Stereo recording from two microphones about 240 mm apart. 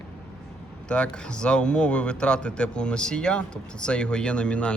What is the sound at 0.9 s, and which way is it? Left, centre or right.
A man's voice, centre.